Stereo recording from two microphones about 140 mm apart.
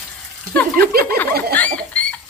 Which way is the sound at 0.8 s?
90° right.